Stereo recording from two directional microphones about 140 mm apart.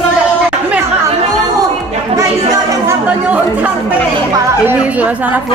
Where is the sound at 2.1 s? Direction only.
20° right (ahead or behind).